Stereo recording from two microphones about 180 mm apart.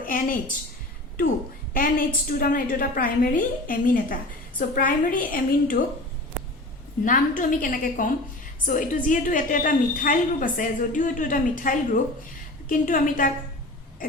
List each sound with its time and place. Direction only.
0.0 s a woman's voice: 50° left (ahead or behind)
1.7 s a woman's voice: 50° left (ahead or behind)
7.0 s a woman's voice: 45° left (ahead or behind)